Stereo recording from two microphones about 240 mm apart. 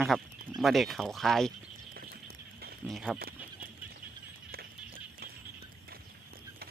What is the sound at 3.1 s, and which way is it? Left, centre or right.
Goat, right.